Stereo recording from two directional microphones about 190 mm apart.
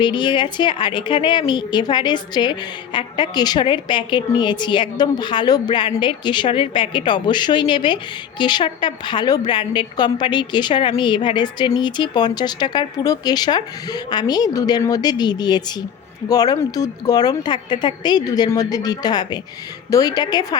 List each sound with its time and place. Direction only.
0.0 s a woman's voice: 25° left (ahead or behind)